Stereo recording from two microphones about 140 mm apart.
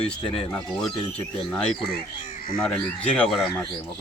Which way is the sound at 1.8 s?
90° left.